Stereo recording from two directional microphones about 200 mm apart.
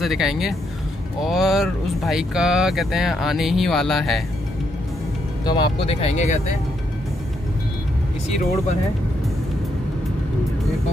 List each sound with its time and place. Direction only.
0.0 s speech: centre (ahead or behind)
5.4 s speech: 20° left (ahead or behind)